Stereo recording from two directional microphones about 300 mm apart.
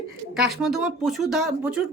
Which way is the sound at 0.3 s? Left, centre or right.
Centre.